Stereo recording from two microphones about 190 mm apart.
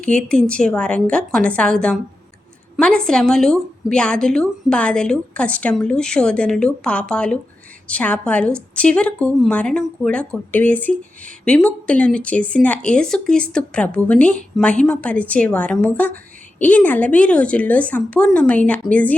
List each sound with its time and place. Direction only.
0.0 s a woman's voice: 5° left (ahead or behind)